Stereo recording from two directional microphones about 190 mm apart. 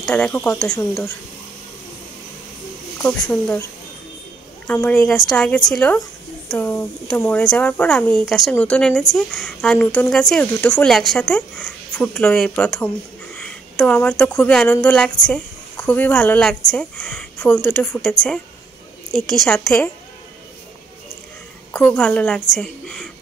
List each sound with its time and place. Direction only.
0.0 s speech: 5° left (ahead or behind)
3.0 s speech: 5° left (ahead or behind)
4.6 s a woman's voice: 5° left (ahead or behind)
21.7 s speech: 5° left (ahead or behind)